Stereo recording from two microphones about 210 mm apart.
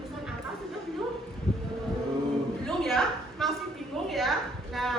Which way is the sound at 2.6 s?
Centre (ahead or behind).